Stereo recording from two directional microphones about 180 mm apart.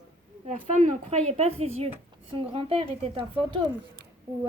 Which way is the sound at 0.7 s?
40° right (ahead or behind).